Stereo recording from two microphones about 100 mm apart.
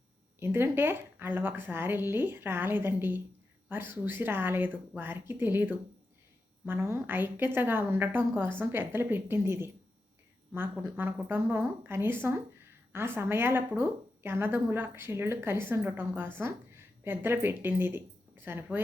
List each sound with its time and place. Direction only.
0.3 s speech: 25° right (ahead or behind)